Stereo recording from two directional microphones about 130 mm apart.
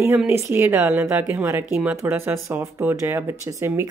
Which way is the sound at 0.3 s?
20° right (ahead or behind).